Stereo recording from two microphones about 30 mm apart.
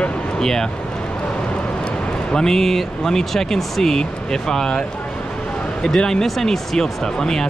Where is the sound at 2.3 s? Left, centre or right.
Left.